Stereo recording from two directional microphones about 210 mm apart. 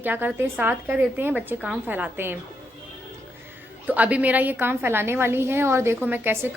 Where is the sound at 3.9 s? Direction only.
5° right (ahead or behind).